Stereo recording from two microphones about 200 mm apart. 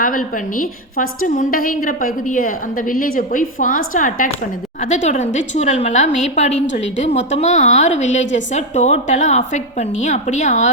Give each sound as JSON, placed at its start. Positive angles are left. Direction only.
{"t": 0.0, "sound": "a woman's voice", "side_deg": 45}